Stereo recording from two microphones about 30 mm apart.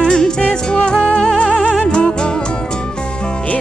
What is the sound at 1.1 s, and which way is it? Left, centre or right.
Music, left.